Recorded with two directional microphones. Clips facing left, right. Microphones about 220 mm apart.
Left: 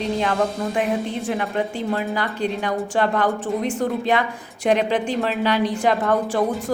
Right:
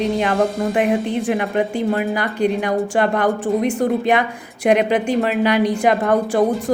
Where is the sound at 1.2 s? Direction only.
15° right (ahead or behind).